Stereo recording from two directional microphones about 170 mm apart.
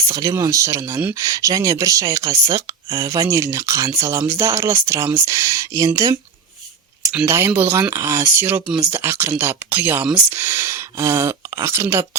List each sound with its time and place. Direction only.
0.1 s speech: 20° right (ahead or behind)